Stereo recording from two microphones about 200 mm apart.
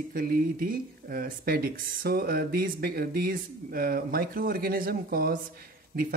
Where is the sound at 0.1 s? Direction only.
45° right (ahead or behind).